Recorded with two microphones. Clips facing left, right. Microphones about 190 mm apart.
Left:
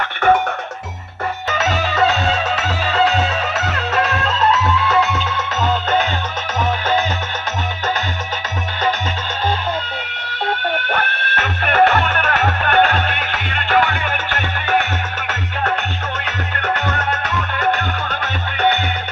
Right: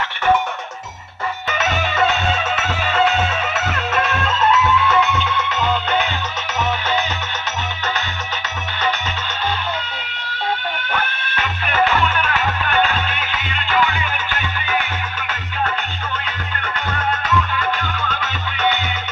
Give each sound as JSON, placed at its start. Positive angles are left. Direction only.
{"t": 0.0, "sound": "music", "side_deg": 55}
{"t": 1.5, "sound": "music", "side_deg": 35}
{"t": 10.8, "sound": "music", "side_deg": 60}
{"t": 16.1, "sound": "music", "side_deg": 75}